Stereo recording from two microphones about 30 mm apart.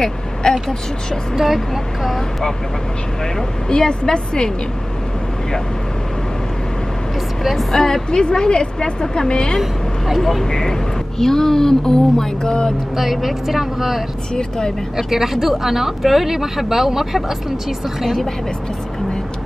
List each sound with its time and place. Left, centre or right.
0.4 s speech: left
1.3 s speech: centre
3.3 s speech: left
7.7 s speech: centre
10.1 s speech: centre
10.4 s speech: centre
12.9 s speech: centre
18.0 s speech: centre